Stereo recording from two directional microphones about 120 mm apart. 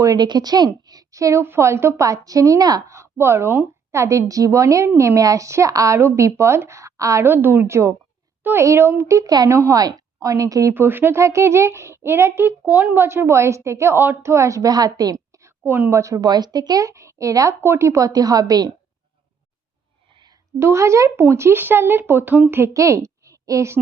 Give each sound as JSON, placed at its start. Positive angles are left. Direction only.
{"t": 0.0, "sound": "a woman's voice", "side_deg": -30}
{"t": 20.1, "sound": "a sound", "side_deg": -40}
{"t": 20.6, "sound": "a woman's voice", "side_deg": -25}